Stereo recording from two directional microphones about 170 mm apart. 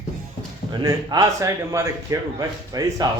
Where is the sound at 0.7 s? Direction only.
25° right (ahead or behind).